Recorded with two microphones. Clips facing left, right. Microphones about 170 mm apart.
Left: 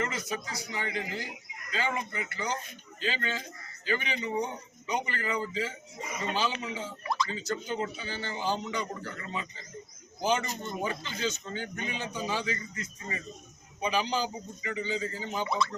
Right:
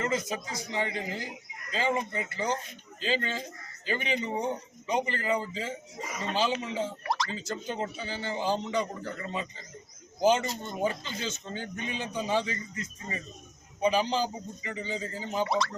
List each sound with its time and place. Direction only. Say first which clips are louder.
0.0 s speech: right 3 dB; 25° right (ahead or behind)
7.0 s drip: even; 80° right
7.3 s a man's voice: left 1 dB; 25° right (ahead or behind)
15.4 s speech: even; 85° right